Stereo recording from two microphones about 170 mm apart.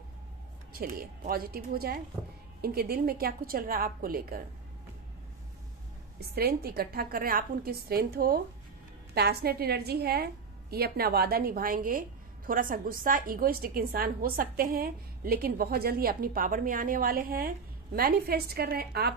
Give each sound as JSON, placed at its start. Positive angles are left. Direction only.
{"t": 0.7, "sound": "a woman's voice", "side_deg": -60}
{"t": 6.1, "sound": "a woman's voice", "side_deg": -65}